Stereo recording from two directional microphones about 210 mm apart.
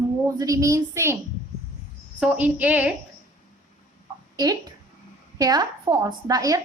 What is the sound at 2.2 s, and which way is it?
Speech, 5° right (ahead or behind).